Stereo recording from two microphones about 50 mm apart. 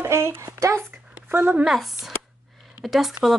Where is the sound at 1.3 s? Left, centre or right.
Right.